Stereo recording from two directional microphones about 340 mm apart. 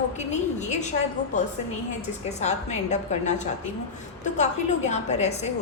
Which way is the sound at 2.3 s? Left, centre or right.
Centre.